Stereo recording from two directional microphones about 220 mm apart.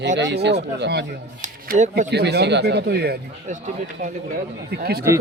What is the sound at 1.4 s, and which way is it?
Speech, 35° right (ahead or behind).